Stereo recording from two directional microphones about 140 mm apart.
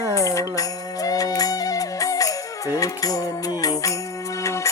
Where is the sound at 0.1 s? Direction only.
20° left (ahead or behind).